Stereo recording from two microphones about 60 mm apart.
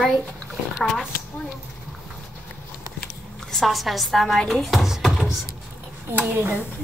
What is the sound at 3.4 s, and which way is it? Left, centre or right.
Speech, centre.